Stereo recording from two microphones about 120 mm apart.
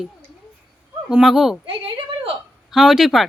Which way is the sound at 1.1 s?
5° right (ahead or behind).